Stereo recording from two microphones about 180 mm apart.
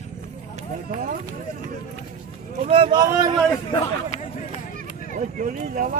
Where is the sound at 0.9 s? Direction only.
50° right (ahead or behind).